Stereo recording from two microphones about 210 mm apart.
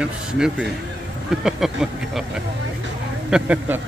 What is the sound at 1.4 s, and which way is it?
Speech, centre (ahead or behind).